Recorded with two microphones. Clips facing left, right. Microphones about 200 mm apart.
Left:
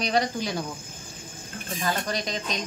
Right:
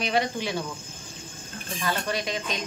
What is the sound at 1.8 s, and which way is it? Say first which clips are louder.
Speech: even; 40° left (ahead or behind).